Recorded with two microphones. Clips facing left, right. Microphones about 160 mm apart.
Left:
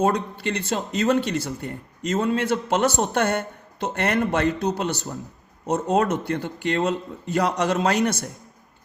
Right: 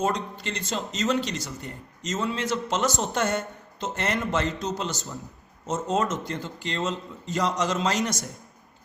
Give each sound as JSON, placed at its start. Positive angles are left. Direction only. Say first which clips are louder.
{"t": 0.0, "sound": "speech", "louder": "left 5 dB", "side_deg": 55}